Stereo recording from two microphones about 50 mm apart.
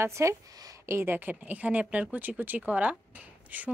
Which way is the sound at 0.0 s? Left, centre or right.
Right.